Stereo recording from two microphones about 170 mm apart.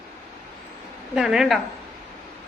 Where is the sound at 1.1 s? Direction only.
Centre (ahead or behind).